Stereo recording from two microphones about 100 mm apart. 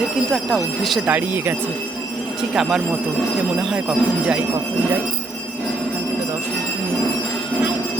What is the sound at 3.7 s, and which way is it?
Speech, 10° right (ahead or behind).